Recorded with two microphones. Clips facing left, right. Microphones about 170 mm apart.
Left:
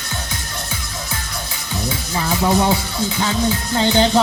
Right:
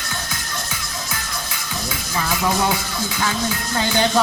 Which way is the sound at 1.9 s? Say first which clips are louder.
Left 2 dB; 30° left (ahead or behind).